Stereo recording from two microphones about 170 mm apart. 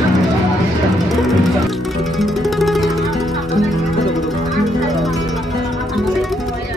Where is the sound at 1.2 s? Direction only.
Centre (ahead or behind).